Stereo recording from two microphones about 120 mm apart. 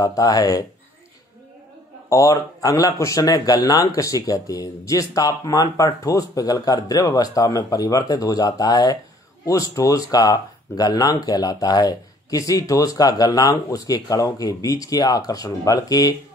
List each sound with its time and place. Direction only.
0.0 s speech: 30° left (ahead or behind)
2.0 s speech: 30° left (ahead or behind)